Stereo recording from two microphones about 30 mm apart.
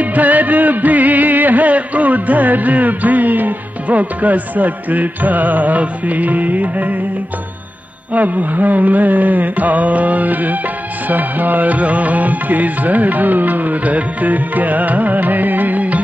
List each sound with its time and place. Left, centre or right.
0.0 s music: right
3.9 s music: right
5.8 s music: right
8.1 s music: right